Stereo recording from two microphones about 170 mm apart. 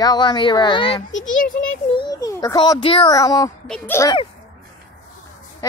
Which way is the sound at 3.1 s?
20° left (ahead or behind).